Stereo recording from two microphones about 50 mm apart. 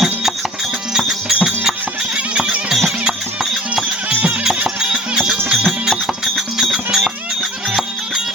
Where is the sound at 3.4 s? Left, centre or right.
Centre.